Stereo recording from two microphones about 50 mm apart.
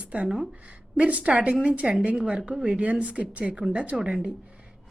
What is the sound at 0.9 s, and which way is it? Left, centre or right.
A woman's voice, right.